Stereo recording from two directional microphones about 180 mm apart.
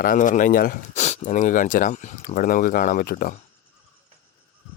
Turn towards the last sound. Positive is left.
turn(degrees=50)  # may be behind; listen again after turning